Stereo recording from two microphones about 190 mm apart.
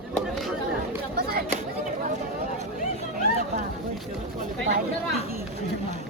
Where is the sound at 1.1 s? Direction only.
50° right (ahead or behind).